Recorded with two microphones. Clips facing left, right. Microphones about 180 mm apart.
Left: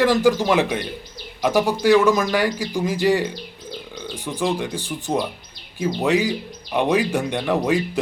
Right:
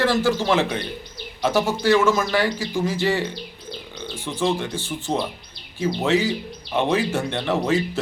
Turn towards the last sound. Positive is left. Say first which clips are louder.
# left 1 dB
turn(degrees=15)  # may be behind; listen again after turning